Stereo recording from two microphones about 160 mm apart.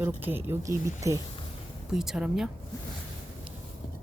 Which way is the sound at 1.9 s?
5° right (ahead or behind).